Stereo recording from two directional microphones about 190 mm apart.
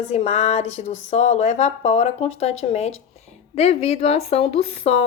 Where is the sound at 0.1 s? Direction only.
35° left (ahead or behind).